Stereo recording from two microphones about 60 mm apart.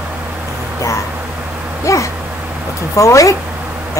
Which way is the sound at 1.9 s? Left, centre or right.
Left.